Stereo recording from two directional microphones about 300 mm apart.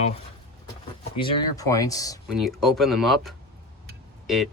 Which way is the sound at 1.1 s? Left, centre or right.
Centre.